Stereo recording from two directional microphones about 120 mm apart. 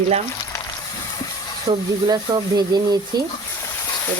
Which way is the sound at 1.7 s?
50° right (ahead or behind).